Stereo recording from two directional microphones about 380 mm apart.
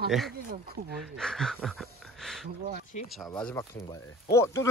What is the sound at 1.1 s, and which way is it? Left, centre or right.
Speech, centre.